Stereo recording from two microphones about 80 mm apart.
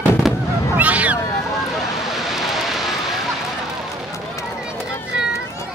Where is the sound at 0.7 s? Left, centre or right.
Centre.